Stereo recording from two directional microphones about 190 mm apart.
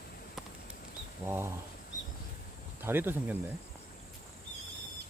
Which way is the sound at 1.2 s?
15° right (ahead or behind).